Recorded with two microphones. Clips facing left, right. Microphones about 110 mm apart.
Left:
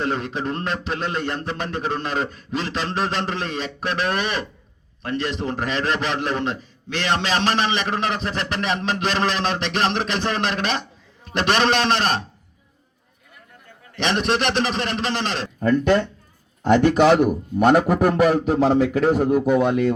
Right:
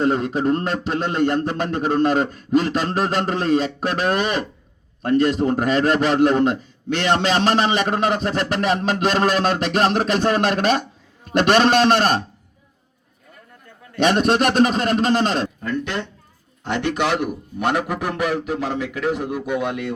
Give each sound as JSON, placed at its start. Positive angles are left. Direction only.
{"t": 0.0, "sound": "a man's voice", "side_deg": -35}
{"t": 13.9, "sound": "speech", "side_deg": -45}
{"t": 15.6, "sound": "speech", "side_deg": 45}